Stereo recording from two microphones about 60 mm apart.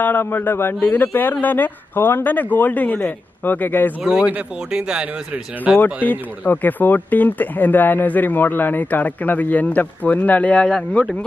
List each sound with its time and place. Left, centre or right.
0.0 s speech: left
4.0 s speech: centre
6.0 s speech: left